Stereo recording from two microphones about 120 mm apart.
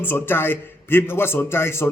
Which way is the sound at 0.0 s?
20° left (ahead or behind).